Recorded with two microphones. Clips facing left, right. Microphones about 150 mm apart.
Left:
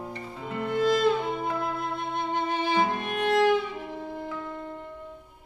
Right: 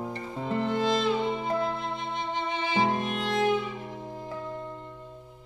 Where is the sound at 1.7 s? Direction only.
55° left (ahead or behind).